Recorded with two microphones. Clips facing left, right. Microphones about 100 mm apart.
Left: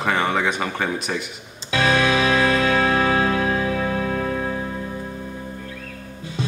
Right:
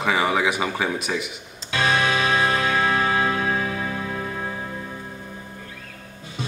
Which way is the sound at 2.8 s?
50° left (ahead or behind).